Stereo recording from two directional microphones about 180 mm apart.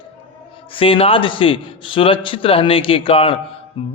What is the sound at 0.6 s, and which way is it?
A man's voice, 30° left (ahead or behind).